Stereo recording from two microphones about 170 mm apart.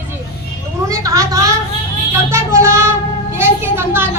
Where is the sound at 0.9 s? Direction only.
20° right (ahead or behind).